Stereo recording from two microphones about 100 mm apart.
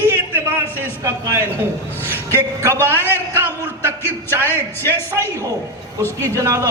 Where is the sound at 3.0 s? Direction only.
20° right (ahead or behind).